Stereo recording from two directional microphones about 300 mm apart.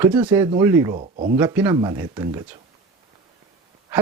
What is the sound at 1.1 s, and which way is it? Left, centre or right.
Speech, right.